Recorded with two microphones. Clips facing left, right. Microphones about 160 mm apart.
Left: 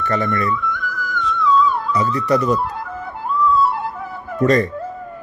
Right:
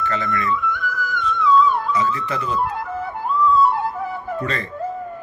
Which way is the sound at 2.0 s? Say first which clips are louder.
Left 5 dB; 40° left (ahead or behind).